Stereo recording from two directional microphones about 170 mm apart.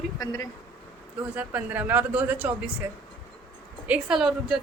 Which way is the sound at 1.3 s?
10° right (ahead or behind).